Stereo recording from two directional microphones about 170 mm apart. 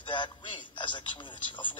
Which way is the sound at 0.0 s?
30° left (ahead or behind).